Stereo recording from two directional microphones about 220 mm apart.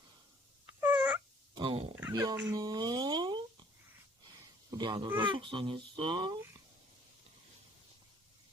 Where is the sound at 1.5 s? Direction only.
25° right (ahead or behind).